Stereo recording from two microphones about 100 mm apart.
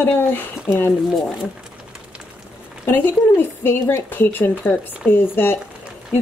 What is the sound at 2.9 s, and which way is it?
Speech, 20° left (ahead or behind).